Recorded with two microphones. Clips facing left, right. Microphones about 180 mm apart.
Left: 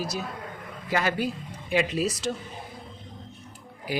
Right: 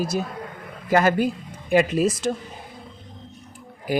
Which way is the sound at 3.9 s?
50° right (ahead or behind).